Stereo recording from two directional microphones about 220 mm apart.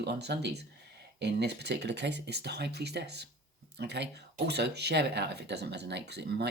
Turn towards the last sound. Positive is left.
turn(degrees=-50)  # may be behind; listen again after turning